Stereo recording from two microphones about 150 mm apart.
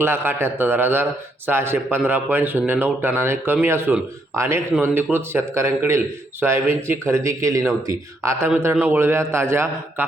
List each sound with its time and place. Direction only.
0.0 s speech: 15° right (ahead or behind)